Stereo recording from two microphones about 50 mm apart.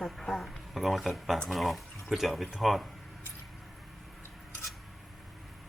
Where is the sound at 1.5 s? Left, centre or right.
Centre.